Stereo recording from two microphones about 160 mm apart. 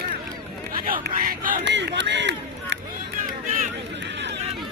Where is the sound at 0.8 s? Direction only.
65° right (ahead or behind); by 2.8 s 90° right.